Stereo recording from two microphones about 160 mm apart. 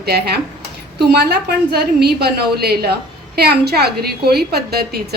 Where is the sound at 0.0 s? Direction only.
85° right.